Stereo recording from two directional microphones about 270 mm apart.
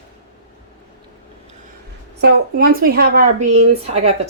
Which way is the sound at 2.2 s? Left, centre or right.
Right.